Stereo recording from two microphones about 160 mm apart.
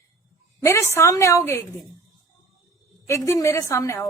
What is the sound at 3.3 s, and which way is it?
Speech, 15° left (ahead or behind).